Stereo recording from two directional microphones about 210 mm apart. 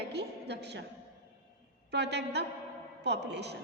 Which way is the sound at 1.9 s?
55° right (ahead or behind).